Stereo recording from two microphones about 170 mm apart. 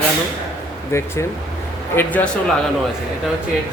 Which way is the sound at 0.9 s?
15° left (ahead or behind).